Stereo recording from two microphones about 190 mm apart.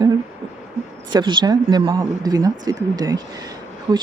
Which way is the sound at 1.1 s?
25° right (ahead or behind).